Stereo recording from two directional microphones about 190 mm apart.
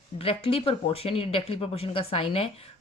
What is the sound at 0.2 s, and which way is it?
Speech, 30° left (ahead or behind).